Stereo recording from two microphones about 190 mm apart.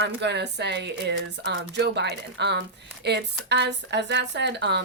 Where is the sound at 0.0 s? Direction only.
65° right (ahead or behind).